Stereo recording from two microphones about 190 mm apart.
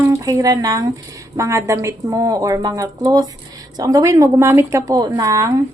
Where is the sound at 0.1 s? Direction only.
15° right (ahead or behind).